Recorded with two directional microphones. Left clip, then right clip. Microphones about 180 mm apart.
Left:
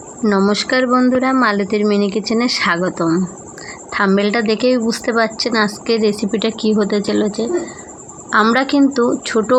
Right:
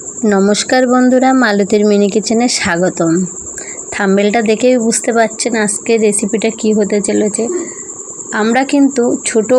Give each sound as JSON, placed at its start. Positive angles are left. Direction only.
{"t": 0.2, "sound": "a woman's voice", "side_deg": -20}